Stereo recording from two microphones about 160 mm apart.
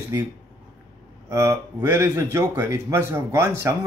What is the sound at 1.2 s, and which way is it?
Speech, 20° right (ahead or behind).